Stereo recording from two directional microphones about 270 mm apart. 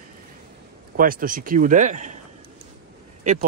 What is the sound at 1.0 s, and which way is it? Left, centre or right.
Speech, right.